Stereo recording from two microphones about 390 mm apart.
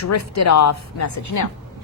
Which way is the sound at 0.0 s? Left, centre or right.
Left.